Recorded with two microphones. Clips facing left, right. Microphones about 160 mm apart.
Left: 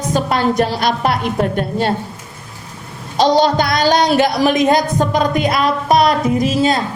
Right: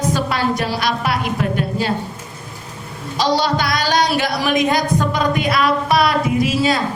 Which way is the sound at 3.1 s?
50° left (ahead or behind).